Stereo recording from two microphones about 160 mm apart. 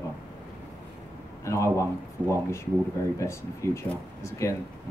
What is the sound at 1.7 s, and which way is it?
Speech, 15° left (ahead or behind).